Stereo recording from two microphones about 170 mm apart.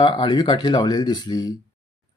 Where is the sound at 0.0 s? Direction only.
25° left (ahead or behind).